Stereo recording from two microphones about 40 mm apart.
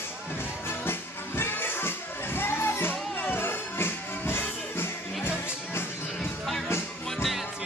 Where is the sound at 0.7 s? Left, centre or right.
Left.